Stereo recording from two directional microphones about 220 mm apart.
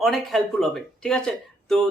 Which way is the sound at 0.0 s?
Centre (ahead or behind).